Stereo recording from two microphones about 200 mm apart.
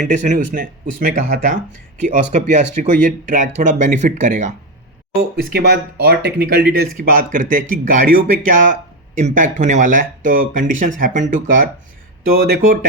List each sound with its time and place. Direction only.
0.0 s speech: 35° right (ahead or behind)
5.4 s speech: 50° right (ahead or behind)